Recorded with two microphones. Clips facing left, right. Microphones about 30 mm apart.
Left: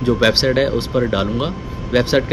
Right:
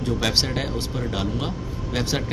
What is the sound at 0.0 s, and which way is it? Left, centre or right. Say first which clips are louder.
Speech: left 8 dB; left.